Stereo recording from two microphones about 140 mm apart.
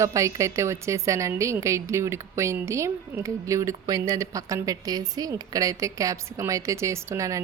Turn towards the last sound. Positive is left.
turn(degrees=-20)  # may be behind; listen again after turning